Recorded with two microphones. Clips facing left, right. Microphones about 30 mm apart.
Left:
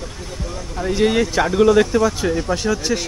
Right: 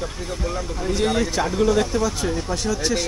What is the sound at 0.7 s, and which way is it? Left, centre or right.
Speech, centre.